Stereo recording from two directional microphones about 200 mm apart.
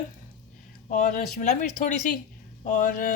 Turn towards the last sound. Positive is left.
turn(degrees=40)  # may be behind; listen again after turning